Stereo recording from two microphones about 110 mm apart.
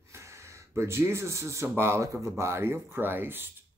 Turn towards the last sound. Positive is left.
turn(degrees=-20)  # may be behind; listen again after turning